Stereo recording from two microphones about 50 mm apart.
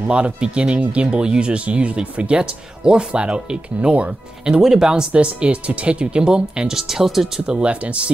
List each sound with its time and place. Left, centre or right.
0.1 s speech: right
4.6 s speech: centre
7.8 s speech: right